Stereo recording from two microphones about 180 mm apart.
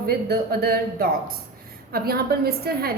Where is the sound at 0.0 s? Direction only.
55° right (ahead or behind).